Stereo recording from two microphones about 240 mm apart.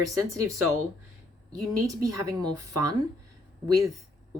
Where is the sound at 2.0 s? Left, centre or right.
Centre.